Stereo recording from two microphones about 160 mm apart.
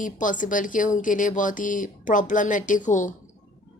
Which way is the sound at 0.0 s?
55° left (ahead or behind).